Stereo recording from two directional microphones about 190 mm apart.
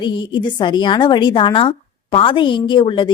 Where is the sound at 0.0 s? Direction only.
25° left (ahead or behind).